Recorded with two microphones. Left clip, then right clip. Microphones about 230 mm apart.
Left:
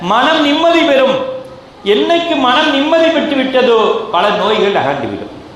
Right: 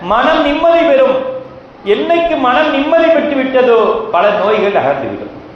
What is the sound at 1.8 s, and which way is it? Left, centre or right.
A man's voice, left.